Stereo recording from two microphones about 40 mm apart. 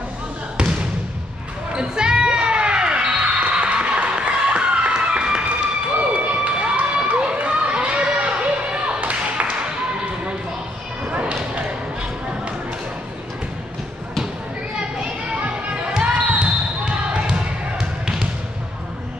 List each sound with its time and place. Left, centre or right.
0.6 s basketball bounce: right
1.7 s music: right
5.9 s a sound: right
11.1 s basketball bounce: right
15.0 s children playing: right
15.9 s basketball bounce: right